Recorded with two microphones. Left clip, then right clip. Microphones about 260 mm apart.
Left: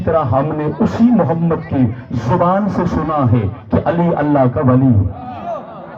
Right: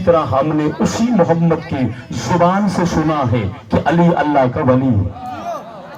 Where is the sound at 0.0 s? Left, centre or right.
Right.